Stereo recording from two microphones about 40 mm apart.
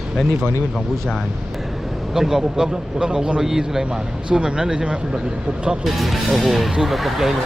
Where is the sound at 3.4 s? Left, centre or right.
Centre.